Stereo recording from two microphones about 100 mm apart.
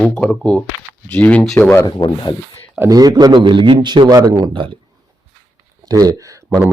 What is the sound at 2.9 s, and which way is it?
A man's voice, 40° right (ahead or behind).